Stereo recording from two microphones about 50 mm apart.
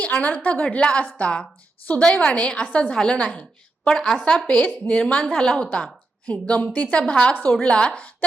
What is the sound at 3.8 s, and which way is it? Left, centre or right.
Speech, centre.